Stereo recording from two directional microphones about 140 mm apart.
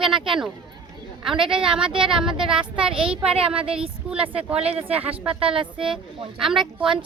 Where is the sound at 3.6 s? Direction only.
40° right (ahead or behind).